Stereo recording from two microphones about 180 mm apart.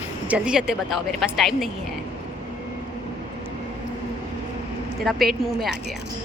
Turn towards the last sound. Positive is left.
turn(degrees=0)  # may be behind; listen again after turning